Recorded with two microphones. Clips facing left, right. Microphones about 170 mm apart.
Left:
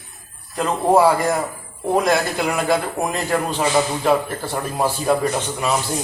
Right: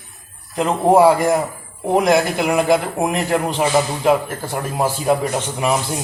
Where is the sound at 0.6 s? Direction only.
15° right (ahead or behind).